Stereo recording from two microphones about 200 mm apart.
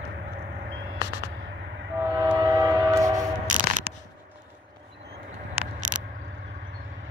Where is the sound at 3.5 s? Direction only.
40° right (ahead or behind).